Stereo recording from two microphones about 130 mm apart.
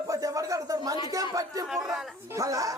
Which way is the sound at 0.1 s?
25° right (ahead or behind).